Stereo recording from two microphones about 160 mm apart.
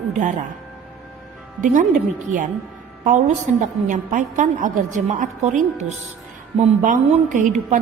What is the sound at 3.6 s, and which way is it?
A woman's voice, 55° right (ahead or behind).